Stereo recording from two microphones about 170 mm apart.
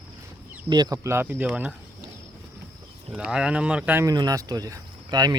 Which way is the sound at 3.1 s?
5° right (ahead or behind).